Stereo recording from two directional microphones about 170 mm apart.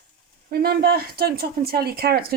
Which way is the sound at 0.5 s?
65° right (ahead or behind).